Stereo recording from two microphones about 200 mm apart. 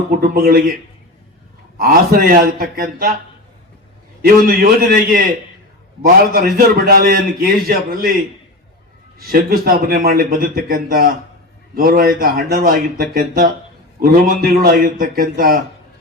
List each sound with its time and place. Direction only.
0.2 s a man's voice: 45° right (ahead or behind)
1.8 s a man's voice: 45° right (ahead or behind)
4.2 s a man's voice: 45° right (ahead or behind)
6.3 s a man's voice: 50° right (ahead or behind)
9.2 s a man's voice: 45° right (ahead or behind)